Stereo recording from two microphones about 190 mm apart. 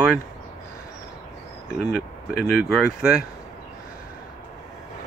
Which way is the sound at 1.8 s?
55° left (ahead or behind).